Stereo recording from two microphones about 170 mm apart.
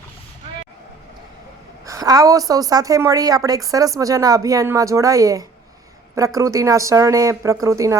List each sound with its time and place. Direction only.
1.9 s a woman's voice: 20° right (ahead or behind)